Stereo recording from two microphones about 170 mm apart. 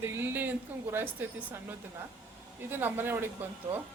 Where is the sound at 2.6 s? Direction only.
10° right (ahead or behind).